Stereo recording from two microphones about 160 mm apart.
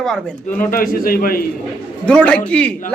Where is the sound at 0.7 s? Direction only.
60° left (ahead or behind).